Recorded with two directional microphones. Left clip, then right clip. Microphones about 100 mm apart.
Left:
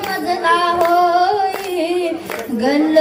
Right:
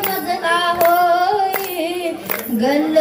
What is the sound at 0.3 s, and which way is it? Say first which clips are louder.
Child singing: left 3 dB; 35° left (ahead or behind).